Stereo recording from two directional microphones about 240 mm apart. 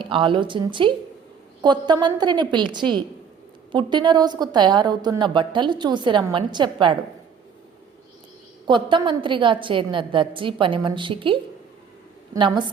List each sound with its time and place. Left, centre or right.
0.0 s a woman's voice: right
8.6 s a woman's voice: centre